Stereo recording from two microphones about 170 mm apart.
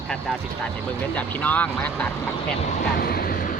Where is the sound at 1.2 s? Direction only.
10° left (ahead or behind).